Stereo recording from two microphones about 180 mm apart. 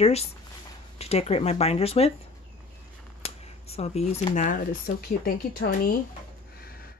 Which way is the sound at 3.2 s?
35° left (ahead or behind).